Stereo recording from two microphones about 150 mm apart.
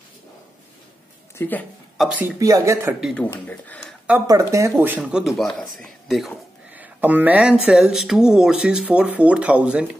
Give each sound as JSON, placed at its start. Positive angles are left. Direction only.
{"t": 1.4, "sound": "a woman's voice", "side_deg": 15}
{"t": 2.0, "sound": "speech", "side_deg": -10}
{"t": 2.3, "sound": "speech", "side_deg": -20}
{"t": 3.0, "sound": "speech", "side_deg": 0}
{"t": 3.4, "sound": "speech", "side_deg": 10}
{"t": 4.3, "sound": "speech", "side_deg": -20}
{"t": 5.1, "sound": "speech", "side_deg": 0}
{"t": 6.7, "sound": "speech", "side_deg": -10}